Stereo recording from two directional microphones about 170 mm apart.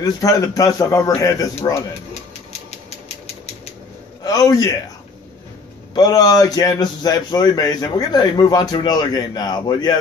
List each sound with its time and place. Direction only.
0.0 s a man's voice: 20° left (ahead or behind)
4.2 s a man's voice: 20° left (ahead or behind)
5.9 s a man's voice: 25° left (ahead or behind)